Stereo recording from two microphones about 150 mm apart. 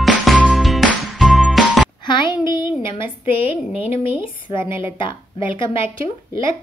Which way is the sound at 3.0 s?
15° right (ahead or behind).